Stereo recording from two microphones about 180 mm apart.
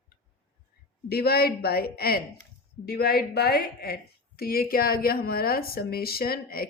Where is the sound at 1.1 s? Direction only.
60° left (ahead or behind).